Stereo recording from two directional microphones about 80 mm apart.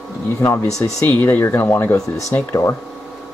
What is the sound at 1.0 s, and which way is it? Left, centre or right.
Speech, left.